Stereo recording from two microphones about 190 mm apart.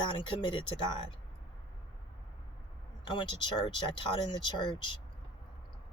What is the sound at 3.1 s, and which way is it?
Speech, 25° left (ahead or behind).